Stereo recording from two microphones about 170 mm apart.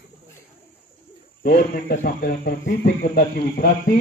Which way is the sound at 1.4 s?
55° left (ahead or behind).